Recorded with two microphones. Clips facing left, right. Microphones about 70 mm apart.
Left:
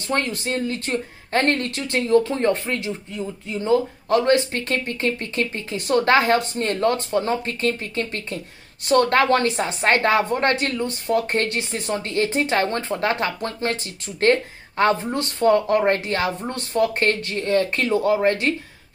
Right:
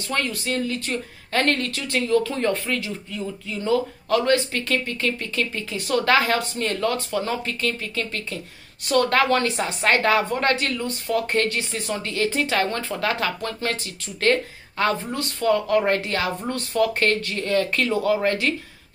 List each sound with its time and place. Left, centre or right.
0.1 s speech: left